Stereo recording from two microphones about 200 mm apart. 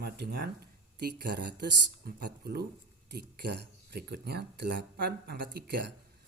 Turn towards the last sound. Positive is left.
turn(degrees=-50)  # may be behind; listen again after turning